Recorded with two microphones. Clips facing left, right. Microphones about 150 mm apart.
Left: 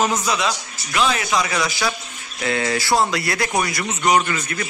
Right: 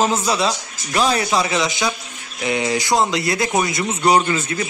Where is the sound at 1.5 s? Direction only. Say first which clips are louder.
Right 2 dB; 20° right (ahead or behind).